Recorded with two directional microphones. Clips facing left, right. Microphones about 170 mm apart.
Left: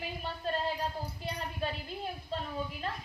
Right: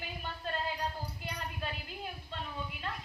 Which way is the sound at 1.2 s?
30° left (ahead or behind).